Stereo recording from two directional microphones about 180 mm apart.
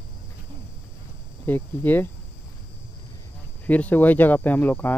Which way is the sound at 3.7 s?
10° left (ahead or behind).